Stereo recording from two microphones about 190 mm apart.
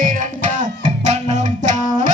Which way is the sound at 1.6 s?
40° right (ahead or behind).